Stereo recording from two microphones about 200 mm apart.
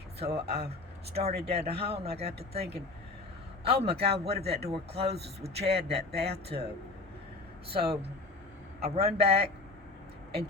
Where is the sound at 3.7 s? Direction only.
30° right (ahead or behind).